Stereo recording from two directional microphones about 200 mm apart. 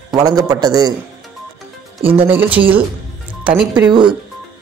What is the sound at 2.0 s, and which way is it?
Speech, 30° right (ahead or behind).